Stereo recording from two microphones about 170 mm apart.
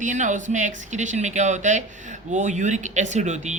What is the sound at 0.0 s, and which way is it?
Speech, 45° right (ahead or behind).